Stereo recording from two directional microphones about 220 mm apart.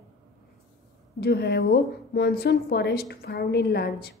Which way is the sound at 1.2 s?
45° left (ahead or behind).